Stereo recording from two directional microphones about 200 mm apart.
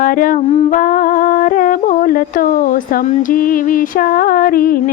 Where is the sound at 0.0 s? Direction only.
45° left (ahead or behind).